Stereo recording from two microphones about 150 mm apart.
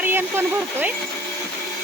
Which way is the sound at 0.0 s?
15° right (ahead or behind).